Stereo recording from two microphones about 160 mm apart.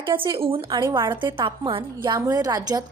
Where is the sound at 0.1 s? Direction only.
30° right (ahead or behind).